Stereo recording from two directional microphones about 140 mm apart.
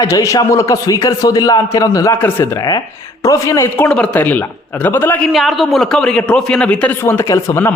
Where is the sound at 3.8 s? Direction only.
10° left (ahead or behind).